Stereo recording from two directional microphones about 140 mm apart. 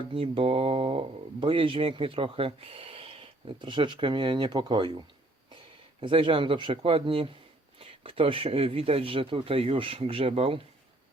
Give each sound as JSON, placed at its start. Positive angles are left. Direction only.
{"t": 0.1, "sound": "speech", "side_deg": -40}